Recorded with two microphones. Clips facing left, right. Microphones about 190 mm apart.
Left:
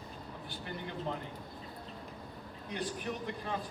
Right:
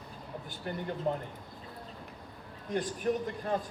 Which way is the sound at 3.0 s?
50° right (ahead or behind).